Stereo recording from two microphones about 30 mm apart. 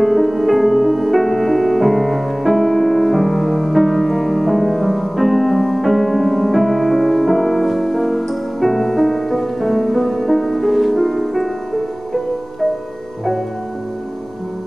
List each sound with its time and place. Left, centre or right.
0.0 s music: centre